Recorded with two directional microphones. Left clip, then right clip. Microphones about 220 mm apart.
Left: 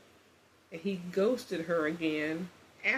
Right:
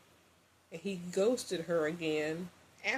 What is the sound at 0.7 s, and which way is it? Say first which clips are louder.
Speech: left 3 dB; 35° right (ahead or behind).